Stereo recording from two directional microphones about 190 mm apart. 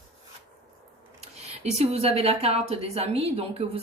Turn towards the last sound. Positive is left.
turn(degrees=-30)  # may be behind; listen again after turning